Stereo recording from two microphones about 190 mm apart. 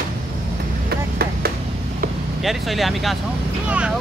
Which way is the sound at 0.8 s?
55° right (ahead or behind).